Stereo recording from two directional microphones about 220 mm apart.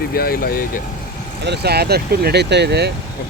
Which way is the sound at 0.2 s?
45° left (ahead or behind).